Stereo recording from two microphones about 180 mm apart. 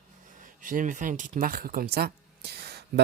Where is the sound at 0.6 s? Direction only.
45° right (ahead or behind).